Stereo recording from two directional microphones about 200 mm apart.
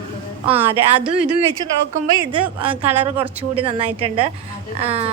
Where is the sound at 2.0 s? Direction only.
20° right (ahead or behind).